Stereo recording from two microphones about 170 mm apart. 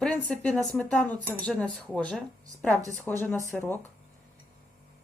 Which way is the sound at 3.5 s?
10° left (ahead or behind).